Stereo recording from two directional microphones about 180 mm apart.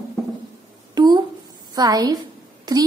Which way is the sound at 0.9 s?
20° right (ahead or behind).